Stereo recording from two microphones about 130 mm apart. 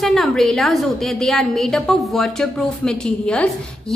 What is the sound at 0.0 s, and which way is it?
A woman's voice, centre (ahead or behind).